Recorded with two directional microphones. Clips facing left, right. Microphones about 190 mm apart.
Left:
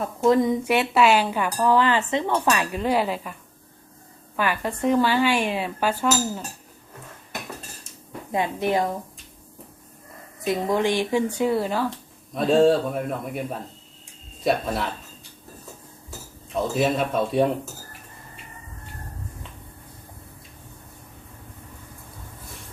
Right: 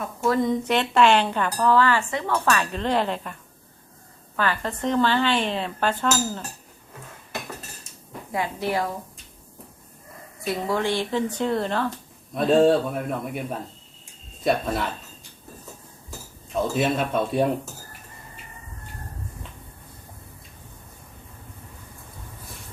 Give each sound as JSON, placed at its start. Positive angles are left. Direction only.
{"t": 0.2, "sound": "speech", "side_deg": 15}
{"t": 4.4, "sound": "speech", "side_deg": 15}
{"t": 8.3, "sound": "a woman's voice", "side_deg": 20}
{"t": 10.4, "sound": "a man's voice", "side_deg": 20}
{"t": 16.0, "sound": "cutlery", "side_deg": 0}